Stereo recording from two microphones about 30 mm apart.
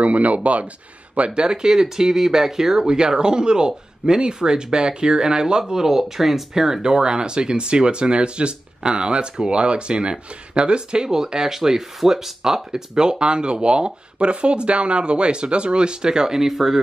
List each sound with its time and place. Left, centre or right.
0.0 s speech: right
1.3 s speech: right
2.9 s speech: right
6.8 s speech: right
11.1 s speech: centre
12.9 s speech: right; by 16.8 s centre